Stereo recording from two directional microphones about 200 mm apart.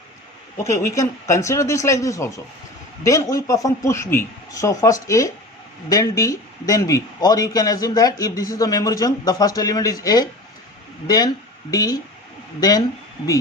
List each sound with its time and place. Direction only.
0.6 s speech: 15° left (ahead or behind)